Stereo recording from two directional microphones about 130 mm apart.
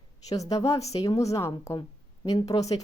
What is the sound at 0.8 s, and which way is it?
Speech, 55° left (ahead or behind).